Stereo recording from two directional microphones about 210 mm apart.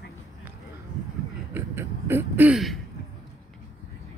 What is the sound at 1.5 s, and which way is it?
Speech, 10° right (ahead or behind).